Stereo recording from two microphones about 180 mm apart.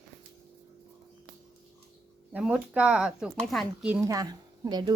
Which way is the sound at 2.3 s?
5° right (ahead or behind).